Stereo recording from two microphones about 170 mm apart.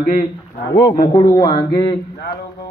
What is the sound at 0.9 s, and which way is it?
Speech, 25° left (ahead or behind).